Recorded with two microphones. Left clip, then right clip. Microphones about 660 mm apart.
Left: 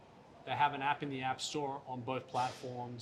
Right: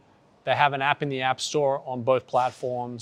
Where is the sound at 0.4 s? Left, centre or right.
Right.